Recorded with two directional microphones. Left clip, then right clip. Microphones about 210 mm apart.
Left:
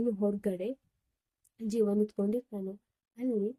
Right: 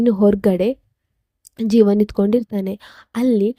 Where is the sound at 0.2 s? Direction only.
45° right (ahead or behind).